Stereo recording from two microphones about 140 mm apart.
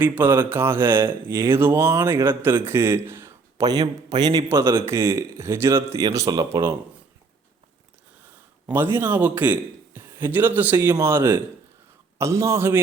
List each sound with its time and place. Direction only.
0.0 s speech: 15° right (ahead or behind); by 4.4 s 30° right (ahead or behind)
4.4 s speech: 20° right (ahead or behind)
8.6 s a man's voice: 15° right (ahead or behind)